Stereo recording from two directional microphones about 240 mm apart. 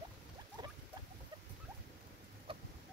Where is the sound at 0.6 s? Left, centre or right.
Centre.